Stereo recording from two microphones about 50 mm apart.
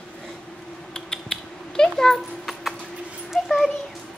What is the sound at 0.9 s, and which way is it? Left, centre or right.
Cat, centre.